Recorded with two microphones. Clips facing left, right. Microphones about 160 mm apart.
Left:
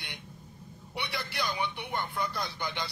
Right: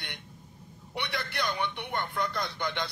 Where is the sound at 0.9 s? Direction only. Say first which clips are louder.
Right 2 dB; 5° left (ahead or behind).